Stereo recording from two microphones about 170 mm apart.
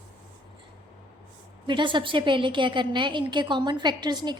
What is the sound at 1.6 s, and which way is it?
A woman's voice, 30° right (ahead or behind).